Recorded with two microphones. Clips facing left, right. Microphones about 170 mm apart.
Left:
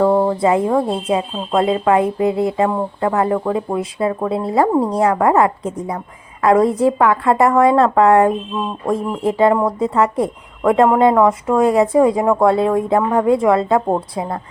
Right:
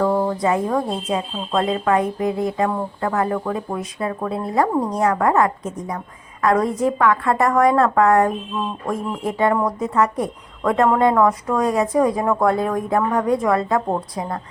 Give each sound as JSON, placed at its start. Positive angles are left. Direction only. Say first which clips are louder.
{"t": 0.0, "sound": "speech", "louder": "left 5 dB", "side_deg": 30}